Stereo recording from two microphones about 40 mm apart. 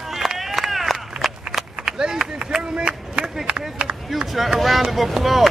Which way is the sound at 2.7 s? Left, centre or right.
Right.